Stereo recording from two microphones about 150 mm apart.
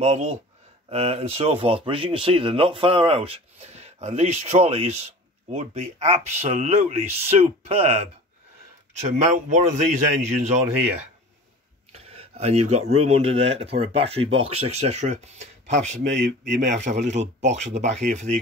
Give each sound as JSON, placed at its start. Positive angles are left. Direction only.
{"t": 0.0, "sound": "speech", "side_deg": -45}
{"t": 9.1, "sound": "speech", "side_deg": -50}
{"t": 11.9, "sound": "speech", "side_deg": -45}